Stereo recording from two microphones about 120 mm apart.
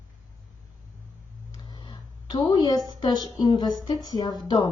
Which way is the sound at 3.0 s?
35° left (ahead or behind).